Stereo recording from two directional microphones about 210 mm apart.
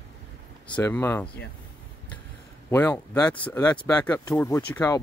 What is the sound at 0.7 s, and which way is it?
Speech, 10° left (ahead or behind).